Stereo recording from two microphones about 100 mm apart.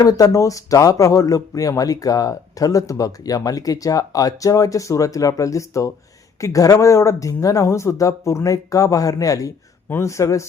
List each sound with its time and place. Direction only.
0.0 s speech: 35° left (ahead or behind)